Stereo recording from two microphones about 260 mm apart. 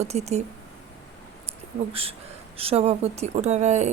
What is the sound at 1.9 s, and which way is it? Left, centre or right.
Speech, right.